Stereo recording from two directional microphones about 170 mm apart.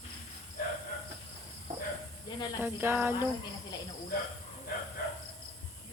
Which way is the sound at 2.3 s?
25° left (ahead or behind).